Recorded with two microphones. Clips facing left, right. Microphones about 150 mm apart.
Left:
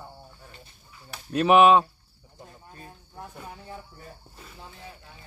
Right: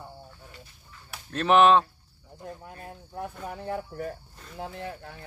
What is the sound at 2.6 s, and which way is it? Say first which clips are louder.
Cricket: right 4 dB; 60° right (ahead or behind).